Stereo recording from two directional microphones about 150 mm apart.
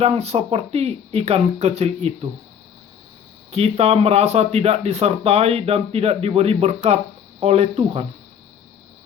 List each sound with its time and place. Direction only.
0.0 s speech: 45° right (ahead or behind)
3.5 s speech: 45° right (ahead or behind)